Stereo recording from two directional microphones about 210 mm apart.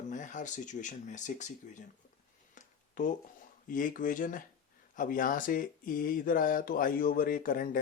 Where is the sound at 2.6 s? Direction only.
40° left (ahead or behind).